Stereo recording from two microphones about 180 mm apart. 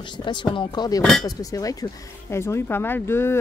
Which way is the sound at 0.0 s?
25° left (ahead or behind).